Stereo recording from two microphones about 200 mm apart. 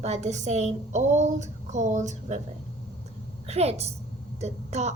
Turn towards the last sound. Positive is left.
turn(degrees=-35)  # may be behind; listen again after turning